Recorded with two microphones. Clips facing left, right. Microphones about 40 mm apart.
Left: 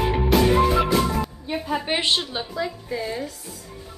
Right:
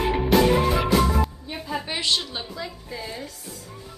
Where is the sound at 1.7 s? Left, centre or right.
Left.